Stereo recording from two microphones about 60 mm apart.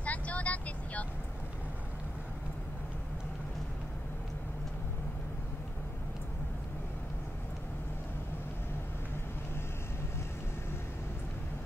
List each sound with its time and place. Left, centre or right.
0.0 s vehicle: left